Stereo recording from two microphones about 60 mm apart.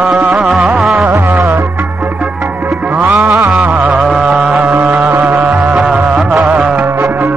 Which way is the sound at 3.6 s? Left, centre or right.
Right.